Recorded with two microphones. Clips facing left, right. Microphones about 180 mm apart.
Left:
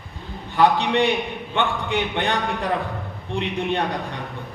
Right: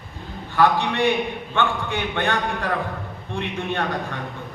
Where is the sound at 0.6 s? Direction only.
15° left (ahead or behind).